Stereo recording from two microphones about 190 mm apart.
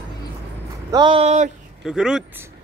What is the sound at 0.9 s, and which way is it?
Speech, 25° right (ahead or behind).